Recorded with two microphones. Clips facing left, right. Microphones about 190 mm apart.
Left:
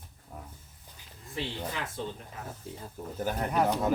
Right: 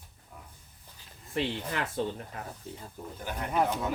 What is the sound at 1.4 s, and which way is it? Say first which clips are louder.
Speech: right 4 dB; 65° right (ahead or behind).